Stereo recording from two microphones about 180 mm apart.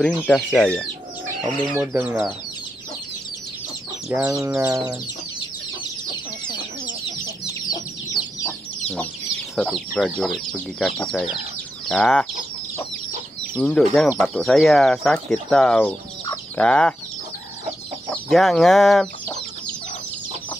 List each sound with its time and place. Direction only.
0.0 s speech: centre (ahead or behind)
4.1 s speech: 10° right (ahead or behind)
7.7 s chicken: 20° left (ahead or behind)
9.6 s speech: 5° left (ahead or behind)
13.4 s speech: 5° left (ahead or behind)
18.1 s speech: centre (ahead or behind)